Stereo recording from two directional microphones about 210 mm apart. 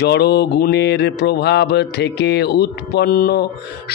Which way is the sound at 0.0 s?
50° left (ahead or behind).